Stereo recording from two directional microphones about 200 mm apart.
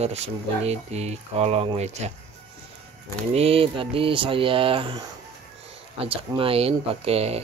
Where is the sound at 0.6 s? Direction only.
30° right (ahead or behind).